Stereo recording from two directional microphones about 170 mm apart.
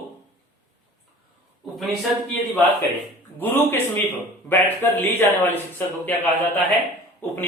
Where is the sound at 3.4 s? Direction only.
10° left (ahead or behind).